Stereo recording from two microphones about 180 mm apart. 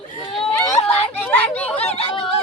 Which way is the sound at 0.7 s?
35° left (ahead or behind).